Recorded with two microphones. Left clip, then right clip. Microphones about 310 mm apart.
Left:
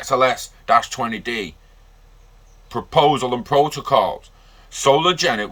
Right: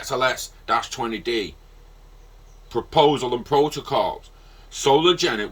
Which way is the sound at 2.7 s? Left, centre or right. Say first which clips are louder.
Left 2 dB; centre.